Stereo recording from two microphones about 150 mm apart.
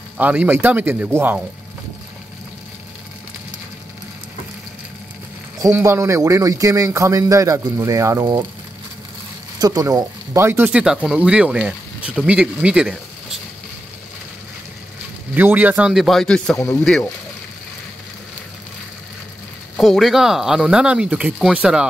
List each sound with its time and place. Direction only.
0.2 s speech: 10° right (ahead or behind)
5.6 s a man's voice: 20° right (ahead or behind)
9.6 s speech: 25° right (ahead or behind); by 13.4 s 5° right (ahead or behind)
15.3 s speech: 10° right (ahead or behind); by 16.5 s 5° left (ahead or behind)
16.5 s speech: 20° left (ahead or behind)
19.8 s speech: centre (ahead or behind)